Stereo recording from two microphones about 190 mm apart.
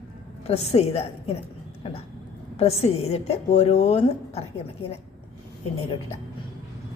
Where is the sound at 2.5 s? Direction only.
30° left (ahead or behind).